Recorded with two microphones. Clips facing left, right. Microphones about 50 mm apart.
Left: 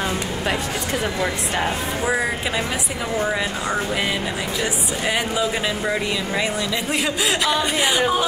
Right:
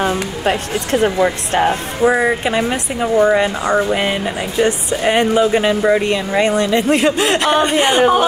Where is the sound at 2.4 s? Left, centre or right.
Right.